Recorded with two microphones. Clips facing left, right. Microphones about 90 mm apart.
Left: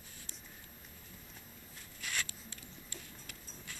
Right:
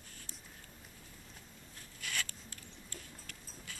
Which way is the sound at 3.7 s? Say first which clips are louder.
Even; centre (ahead or behind).